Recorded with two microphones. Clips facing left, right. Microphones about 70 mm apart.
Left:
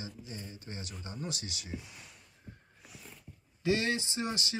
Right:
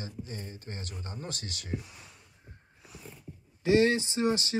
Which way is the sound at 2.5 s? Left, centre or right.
Right.